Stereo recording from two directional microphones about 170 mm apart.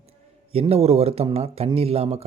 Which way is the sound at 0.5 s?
35° right (ahead or behind).